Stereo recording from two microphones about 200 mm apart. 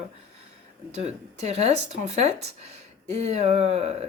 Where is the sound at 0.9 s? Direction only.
35° right (ahead or behind).